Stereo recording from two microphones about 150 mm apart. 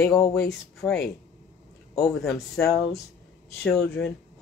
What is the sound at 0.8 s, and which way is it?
Speech, 5° left (ahead or behind).